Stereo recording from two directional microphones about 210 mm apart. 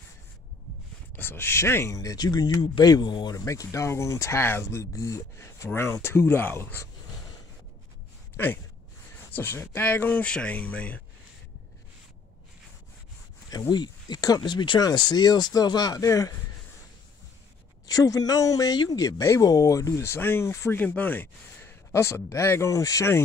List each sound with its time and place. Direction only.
1.1 s speech: 10° left (ahead or behind)
9.3 s speech: 10° left (ahead or behind)
13.5 s speech: 20° left (ahead or behind)
17.8 s speech: 15° left (ahead or behind)